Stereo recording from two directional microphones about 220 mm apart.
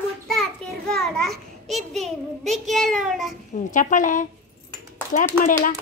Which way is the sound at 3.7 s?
35° left (ahead or behind).